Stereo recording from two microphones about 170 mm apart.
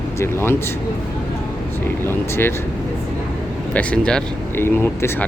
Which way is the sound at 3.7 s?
5° left (ahead or behind).